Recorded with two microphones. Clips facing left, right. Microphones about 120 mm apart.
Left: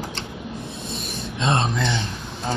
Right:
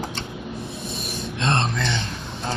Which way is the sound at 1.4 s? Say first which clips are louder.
Left 2 dB; 5° left (ahead or behind).